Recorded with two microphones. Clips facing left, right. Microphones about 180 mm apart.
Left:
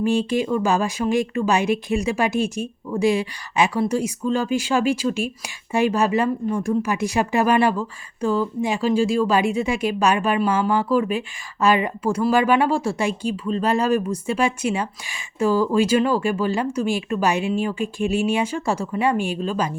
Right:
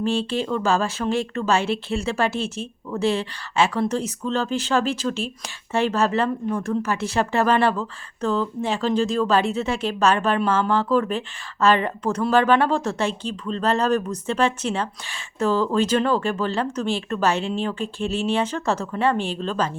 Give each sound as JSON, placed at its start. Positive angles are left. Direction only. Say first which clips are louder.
{"t": 0.0, "sound": "speech", "louder": "left 3 dB", "side_deg": 15}